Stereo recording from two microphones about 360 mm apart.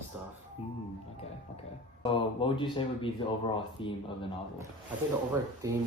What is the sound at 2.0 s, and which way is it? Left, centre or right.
Speech, centre.